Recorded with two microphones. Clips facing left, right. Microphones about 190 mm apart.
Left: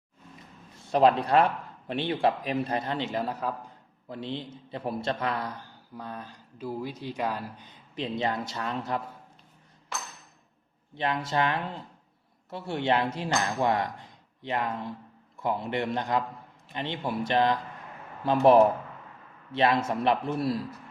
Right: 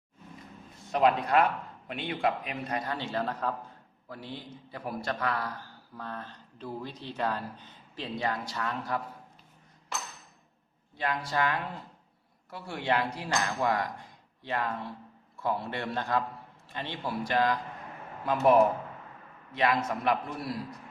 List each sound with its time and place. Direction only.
0.9 s a man's voice: 30° left (ahead or behind); by 3.5 s 10° left (ahead or behind)
4.1 s a man's voice: 25° left (ahead or behind)
10.9 s a man's voice: 25° left (ahead or behind)